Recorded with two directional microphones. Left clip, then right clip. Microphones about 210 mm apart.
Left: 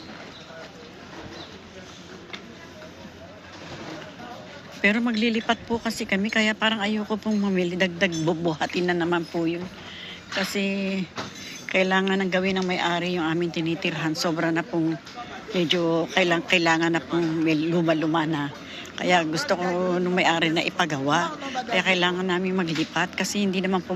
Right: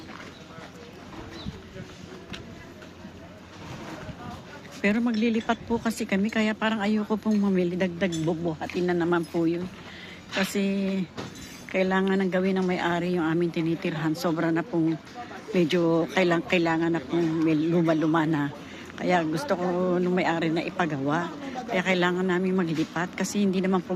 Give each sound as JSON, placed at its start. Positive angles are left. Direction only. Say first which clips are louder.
{"t": 4.8, "sound": "speech", "louder": "left 4 dB", "side_deg": -5}
{"t": 8.2, "sound": "speech", "louder": "left 4 dB", "side_deg": 5}
{"t": 8.9, "sound": "speech", "louder": "left 1 dB", "side_deg": -15}
{"t": 15.5, "sound": "a man's voice", "louder": "even", "side_deg": -20}